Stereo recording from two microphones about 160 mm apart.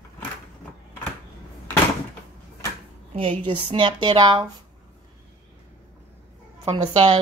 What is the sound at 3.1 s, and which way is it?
Speech, 35° right (ahead or behind).